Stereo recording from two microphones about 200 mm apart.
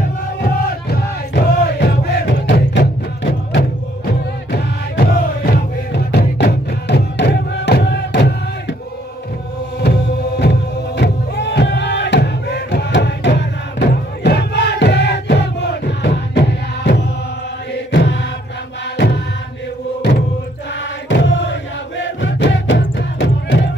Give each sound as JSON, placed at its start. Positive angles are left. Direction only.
{"t": 0.4, "sound": "music", "side_deg": 50}
{"t": 9.8, "sound": "music", "side_deg": 55}
{"t": 21.1, "sound": "chant", "side_deg": 60}